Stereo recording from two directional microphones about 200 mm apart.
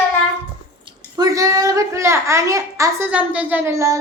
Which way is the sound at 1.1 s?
15° right (ahead or behind).